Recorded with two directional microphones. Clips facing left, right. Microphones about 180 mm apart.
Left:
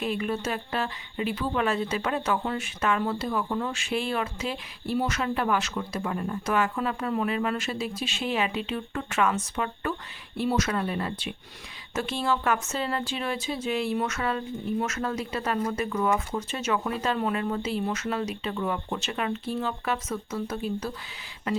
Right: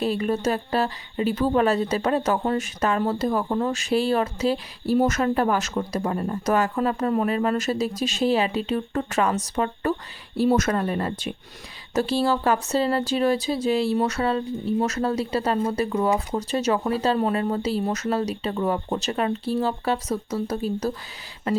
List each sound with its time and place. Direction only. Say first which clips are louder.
0.0 s speech: right 6 dB; 35° right (ahead or behind)